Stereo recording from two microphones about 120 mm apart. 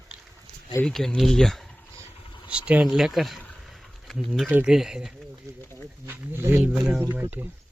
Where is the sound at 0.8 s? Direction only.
5° left (ahead or behind).